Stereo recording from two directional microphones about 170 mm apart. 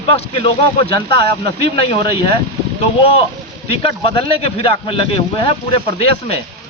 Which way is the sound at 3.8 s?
35° left (ahead or behind).